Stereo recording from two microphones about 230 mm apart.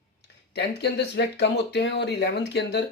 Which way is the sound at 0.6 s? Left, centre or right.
Left.